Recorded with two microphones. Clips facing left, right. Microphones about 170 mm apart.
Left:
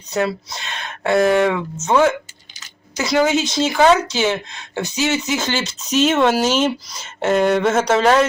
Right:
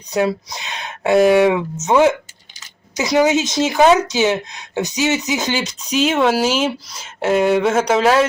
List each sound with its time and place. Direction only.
0.1 s a man's voice: 15° right (ahead or behind)